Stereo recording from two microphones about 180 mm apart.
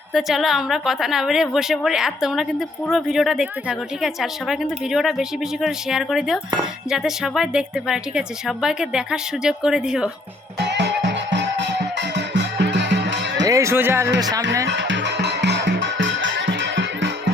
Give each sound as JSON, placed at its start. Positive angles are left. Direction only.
{"t": 0.1, "sound": "speech", "side_deg": 0}
{"t": 10.6, "sound": "music", "side_deg": -75}
{"t": 13.4, "sound": "speech", "side_deg": -15}
{"t": 14.7, "sound": "music", "side_deg": -85}